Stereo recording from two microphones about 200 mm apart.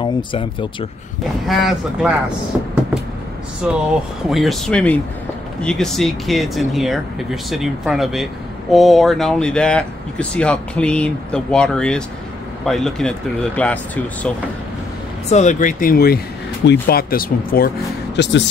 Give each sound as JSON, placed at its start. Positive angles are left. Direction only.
{"t": 0.0, "sound": "speech", "side_deg": 25}
{"t": 1.5, "sound": "speech", "side_deg": 0}
{"t": 15.2, "sound": "speech", "side_deg": 35}
{"t": 18.1, "sound": "speech", "side_deg": 60}